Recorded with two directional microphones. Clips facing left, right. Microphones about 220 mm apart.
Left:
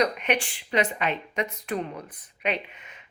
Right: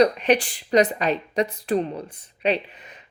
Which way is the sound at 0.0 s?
35° right (ahead or behind).